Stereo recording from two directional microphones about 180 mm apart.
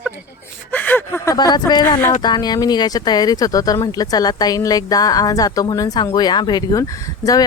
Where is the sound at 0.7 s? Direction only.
10° left (ahead or behind).